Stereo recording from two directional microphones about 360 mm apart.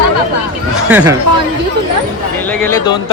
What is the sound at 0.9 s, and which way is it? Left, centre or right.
Speech, centre.